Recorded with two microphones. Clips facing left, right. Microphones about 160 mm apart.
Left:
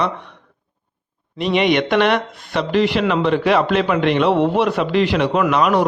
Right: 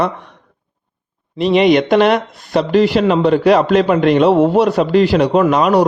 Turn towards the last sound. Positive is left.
turn(degrees=-40)  # may be behind; listen again after turning